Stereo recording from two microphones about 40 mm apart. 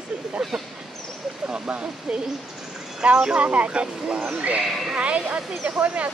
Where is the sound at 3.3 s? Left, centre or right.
Right.